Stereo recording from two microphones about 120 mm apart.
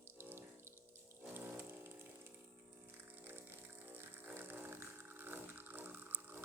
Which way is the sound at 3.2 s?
20° right (ahead or behind).